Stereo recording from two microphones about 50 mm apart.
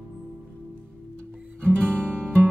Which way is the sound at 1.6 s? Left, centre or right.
Left.